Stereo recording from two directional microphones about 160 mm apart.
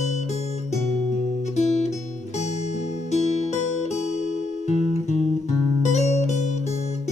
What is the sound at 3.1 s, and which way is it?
Music, 45° left (ahead or behind).